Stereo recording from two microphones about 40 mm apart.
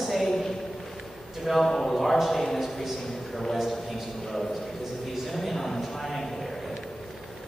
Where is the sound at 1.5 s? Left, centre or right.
Centre.